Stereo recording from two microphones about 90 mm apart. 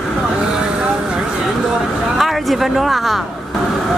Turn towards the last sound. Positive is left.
turn(degrees=0)  # may be behind; listen again after turning